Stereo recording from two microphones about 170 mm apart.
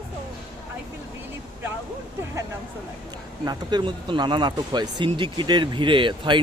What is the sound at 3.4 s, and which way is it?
Speech, 25° right (ahead or behind).